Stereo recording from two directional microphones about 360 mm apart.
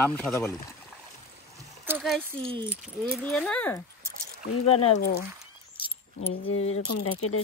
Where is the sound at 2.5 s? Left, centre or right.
Centre.